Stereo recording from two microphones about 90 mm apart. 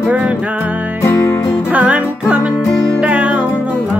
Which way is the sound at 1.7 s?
15° right (ahead or behind).